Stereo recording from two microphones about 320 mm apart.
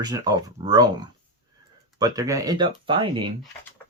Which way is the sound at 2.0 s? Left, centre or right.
Centre.